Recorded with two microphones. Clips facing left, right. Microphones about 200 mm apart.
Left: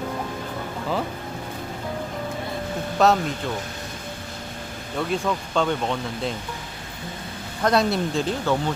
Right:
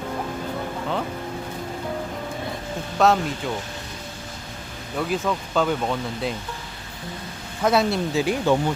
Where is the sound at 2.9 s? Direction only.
Centre (ahead or behind).